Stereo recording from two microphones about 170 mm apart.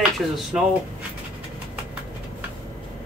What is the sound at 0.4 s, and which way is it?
Speech, centre (ahead or behind).